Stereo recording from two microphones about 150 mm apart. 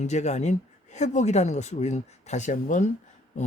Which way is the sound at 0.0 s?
50° left (ahead or behind).